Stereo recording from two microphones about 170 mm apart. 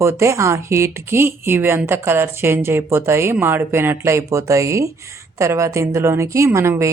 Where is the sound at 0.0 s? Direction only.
15° right (ahead or behind).